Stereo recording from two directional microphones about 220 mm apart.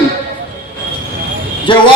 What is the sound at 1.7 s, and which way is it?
Speech, 20° left (ahead or behind).